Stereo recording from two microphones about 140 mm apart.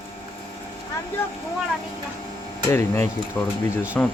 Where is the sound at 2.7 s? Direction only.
15° left (ahead or behind).